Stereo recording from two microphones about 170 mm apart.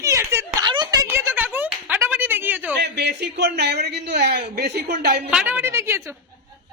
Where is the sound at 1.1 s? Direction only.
15° right (ahead or behind).